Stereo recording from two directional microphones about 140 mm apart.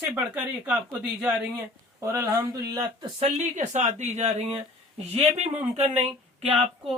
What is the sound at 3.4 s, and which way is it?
Speech, 60° right (ahead or behind).